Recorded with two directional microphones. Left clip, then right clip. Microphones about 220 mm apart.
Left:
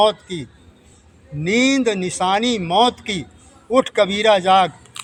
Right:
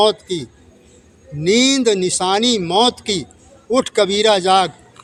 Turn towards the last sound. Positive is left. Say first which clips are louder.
# even
turn(degrees=-35)  # may be behind; listen again after turning